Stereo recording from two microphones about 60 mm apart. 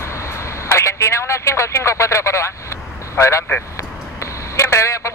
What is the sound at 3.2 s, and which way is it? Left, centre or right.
Speech, left.